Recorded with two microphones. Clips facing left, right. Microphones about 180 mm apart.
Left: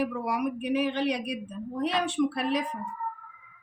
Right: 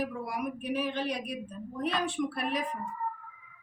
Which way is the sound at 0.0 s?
70° left (ahead or behind).